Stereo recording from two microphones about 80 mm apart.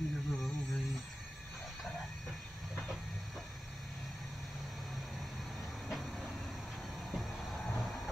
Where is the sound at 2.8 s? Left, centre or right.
Centre.